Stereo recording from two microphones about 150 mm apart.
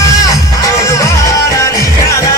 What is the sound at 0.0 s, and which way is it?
Music, 20° left (ahead or behind).